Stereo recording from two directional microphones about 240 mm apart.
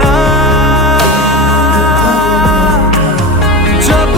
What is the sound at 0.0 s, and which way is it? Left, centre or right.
Music, centre.